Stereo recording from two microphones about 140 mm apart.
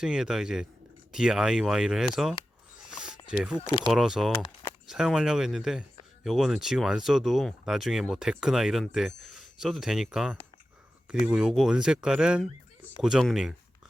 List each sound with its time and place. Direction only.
0.0 s speech: 5° right (ahead or behind)
2.8 s a sound: 5° right (ahead or behind)
3.2 s speech: 5° right (ahead or behind)
3.6 s speech: 35° left (ahead or behind)
3.8 s speech: 5° right (ahead or behind)